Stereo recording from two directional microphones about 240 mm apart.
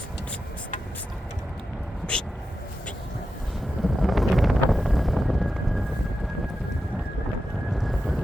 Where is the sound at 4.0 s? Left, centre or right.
Centre.